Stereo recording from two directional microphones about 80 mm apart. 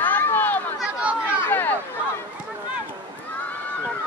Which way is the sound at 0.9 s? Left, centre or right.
Centre.